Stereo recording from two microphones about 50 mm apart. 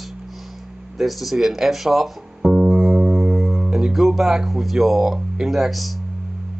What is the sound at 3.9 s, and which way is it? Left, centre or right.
Speech, centre.